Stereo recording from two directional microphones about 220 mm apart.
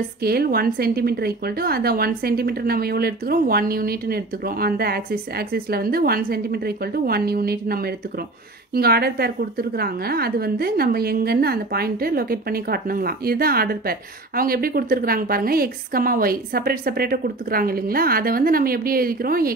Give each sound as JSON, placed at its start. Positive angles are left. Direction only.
{"t": 0.2, "sound": "a woman's voice", "side_deg": -45}